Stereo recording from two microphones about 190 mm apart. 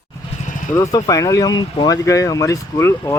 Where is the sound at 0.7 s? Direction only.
20° left (ahead or behind).